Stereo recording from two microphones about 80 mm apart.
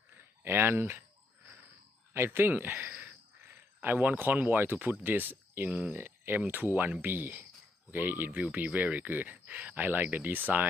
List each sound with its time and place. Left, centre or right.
0.4 s speech: right
2.1 s speech: right